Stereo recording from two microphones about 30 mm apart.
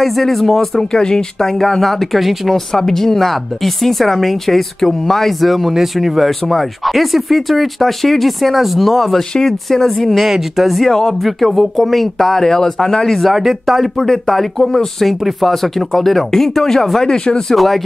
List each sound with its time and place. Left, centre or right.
0.0 s a woman's voice: centre; by 1.2 s left
1.4 s a woman's voice: centre
2.5 s a woman's voice: centre
10.2 s speech: centre
10.9 s a woman's voice: centre
11.2 s speech: centre
12.4 s a woman's voice: centre
13.2 s speech: centre
13.9 s a woman's voice: centre